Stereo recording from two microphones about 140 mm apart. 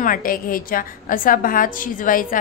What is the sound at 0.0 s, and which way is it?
A woman's voice, 80° left.